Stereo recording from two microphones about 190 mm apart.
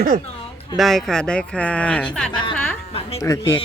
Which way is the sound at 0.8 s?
Centre (ahead or behind).